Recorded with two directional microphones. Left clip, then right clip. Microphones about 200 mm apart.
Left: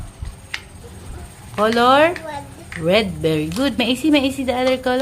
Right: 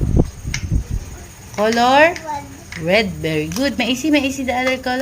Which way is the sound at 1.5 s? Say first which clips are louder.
Even; 15° left (ahead or behind).